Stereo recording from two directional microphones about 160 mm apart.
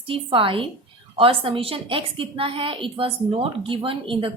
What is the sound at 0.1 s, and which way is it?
A woman's voice, 35° right (ahead or behind).